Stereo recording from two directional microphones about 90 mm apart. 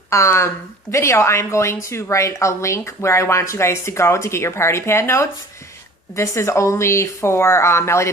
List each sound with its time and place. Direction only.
0.1 s a woman's voice: 30° left (ahead or behind)